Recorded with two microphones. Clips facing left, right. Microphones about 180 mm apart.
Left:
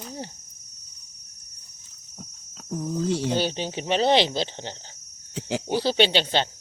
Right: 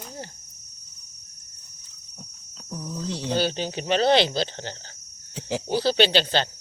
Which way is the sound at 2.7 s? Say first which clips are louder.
Left 6 dB; 55° left (ahead or behind).